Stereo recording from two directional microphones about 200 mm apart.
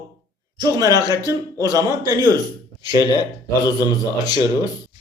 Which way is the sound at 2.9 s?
20° left (ahead or behind).